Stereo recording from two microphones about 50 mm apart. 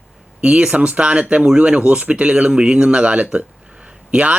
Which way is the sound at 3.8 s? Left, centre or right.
Right.